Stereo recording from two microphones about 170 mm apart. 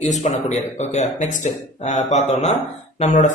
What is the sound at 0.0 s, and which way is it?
Speech, 40° left (ahead or behind).